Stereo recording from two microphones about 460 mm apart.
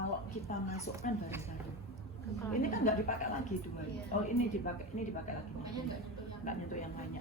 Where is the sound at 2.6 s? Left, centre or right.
Centre.